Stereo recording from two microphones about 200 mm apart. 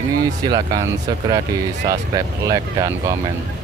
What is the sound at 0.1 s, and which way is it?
Speech, 20° right (ahead or behind).